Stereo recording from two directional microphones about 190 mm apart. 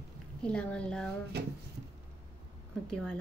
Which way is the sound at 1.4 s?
60° right (ahead or behind).